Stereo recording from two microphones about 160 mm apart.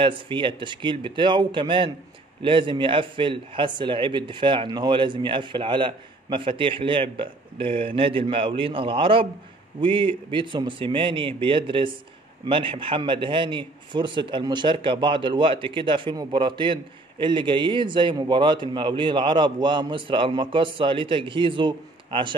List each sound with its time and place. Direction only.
0.0 s a man's voice: 30° right (ahead or behind)